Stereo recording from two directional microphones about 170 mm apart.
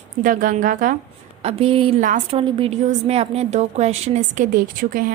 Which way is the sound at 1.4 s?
35° right (ahead or behind).